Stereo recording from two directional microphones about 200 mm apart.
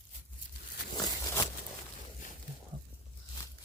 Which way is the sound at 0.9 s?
20° left (ahead or behind).